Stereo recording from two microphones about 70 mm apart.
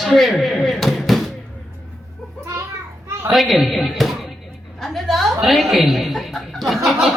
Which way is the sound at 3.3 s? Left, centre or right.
Centre.